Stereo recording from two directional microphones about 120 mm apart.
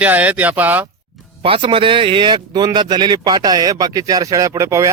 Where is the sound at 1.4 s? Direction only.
50° right (ahead or behind).